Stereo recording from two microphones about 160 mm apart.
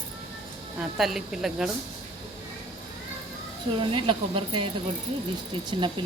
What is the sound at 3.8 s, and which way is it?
Speech, 30° right (ahead or behind).